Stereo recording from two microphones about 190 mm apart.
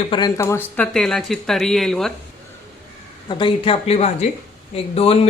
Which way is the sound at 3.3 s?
25° left (ahead or behind).